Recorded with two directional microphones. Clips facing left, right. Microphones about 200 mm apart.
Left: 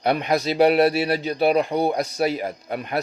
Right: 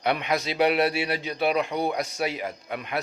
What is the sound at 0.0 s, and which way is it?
Speech, 40° left (ahead or behind).